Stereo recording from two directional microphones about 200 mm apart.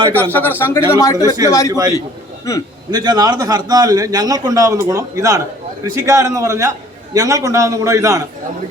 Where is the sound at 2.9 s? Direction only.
20° right (ahead or behind).